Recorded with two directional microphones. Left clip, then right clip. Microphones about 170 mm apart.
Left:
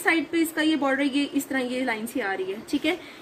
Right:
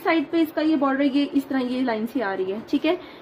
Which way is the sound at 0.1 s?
55° right (ahead or behind).